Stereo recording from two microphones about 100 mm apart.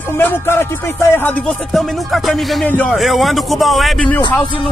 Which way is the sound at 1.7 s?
Centre (ahead or behind).